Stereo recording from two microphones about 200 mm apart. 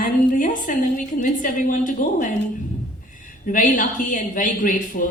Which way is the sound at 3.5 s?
40° left (ahead or behind).